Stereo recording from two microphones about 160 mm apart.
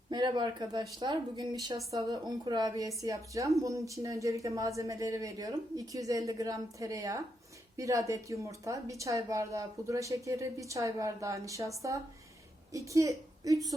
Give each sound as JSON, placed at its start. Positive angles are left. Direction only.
{"t": 0.1, "sound": "a woman's voice", "side_deg": -30}